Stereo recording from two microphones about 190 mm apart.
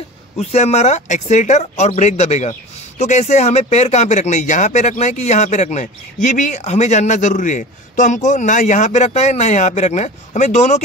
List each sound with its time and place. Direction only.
0.4 s speech: 35° left (ahead or behind)